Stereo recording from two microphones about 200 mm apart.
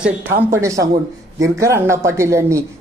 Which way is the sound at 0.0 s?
10° right (ahead or behind).